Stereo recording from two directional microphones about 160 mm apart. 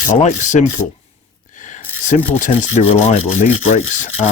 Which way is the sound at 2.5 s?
45° left (ahead or behind).